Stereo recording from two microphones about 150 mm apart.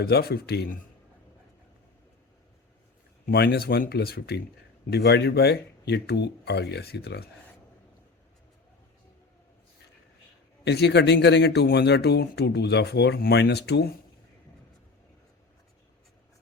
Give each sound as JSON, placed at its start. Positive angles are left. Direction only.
{"t": 0.0, "sound": "speech", "side_deg": 90}
{"t": 3.2, "sound": "speech", "side_deg": 90}
{"t": 10.6, "sound": "speech", "side_deg": 90}